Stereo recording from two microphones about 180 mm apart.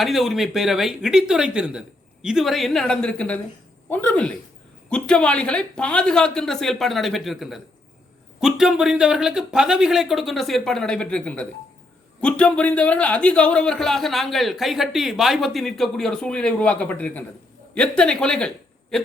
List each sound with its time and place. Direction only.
0.0 s speech: centre (ahead or behind)